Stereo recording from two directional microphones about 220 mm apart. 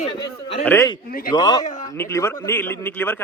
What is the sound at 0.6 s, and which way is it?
Speech, 10° left (ahead or behind).